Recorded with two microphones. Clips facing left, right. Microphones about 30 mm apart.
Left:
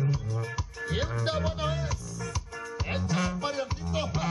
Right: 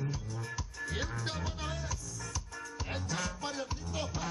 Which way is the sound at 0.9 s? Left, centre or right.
Left.